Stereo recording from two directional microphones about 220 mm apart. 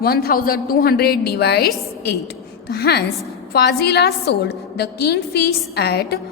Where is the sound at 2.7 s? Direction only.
45° left (ahead or behind).